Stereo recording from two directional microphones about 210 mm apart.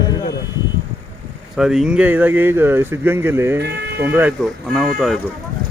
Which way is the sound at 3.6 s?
55° right (ahead or behind).